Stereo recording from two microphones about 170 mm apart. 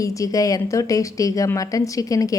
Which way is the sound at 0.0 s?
20° left (ahead or behind).